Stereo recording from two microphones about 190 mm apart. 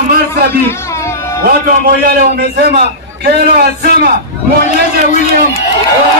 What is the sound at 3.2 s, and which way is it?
Speech, 55° right (ahead or behind).